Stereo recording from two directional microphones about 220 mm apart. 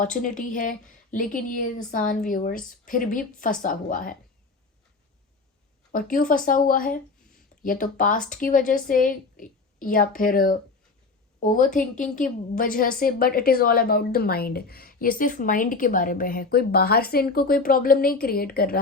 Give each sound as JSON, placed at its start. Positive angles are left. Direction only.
{"t": 0.0, "sound": "a woman's voice", "side_deg": 35}
{"t": 5.9, "sound": "a woman's voice", "side_deg": 40}